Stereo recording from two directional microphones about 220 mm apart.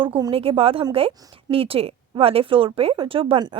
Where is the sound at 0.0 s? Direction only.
20° right (ahead or behind).